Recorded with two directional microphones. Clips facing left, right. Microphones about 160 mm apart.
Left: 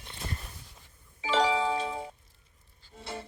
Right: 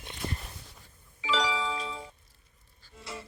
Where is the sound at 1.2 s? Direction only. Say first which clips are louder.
Left 4 dB; 30° left (ahead or behind).